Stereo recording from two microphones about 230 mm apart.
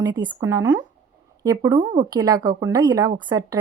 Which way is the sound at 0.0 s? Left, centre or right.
Centre.